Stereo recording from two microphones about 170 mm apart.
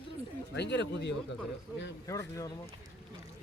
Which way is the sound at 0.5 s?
90° left.